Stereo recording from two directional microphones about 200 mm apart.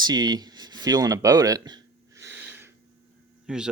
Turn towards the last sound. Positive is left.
turn(degrees=-5)  # may be behind; listen again after turning